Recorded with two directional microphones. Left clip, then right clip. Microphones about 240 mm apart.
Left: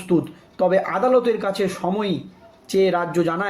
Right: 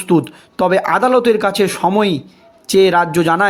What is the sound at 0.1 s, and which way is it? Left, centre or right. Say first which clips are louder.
Speech: right 6 dB; right.